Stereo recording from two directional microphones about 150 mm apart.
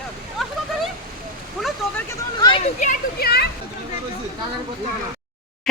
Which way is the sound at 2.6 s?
50° left (ahead or behind).